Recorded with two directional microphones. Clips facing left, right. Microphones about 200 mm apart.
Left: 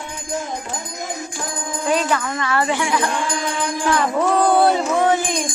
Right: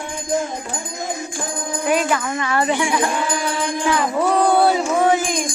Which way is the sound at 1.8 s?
15° right (ahead or behind).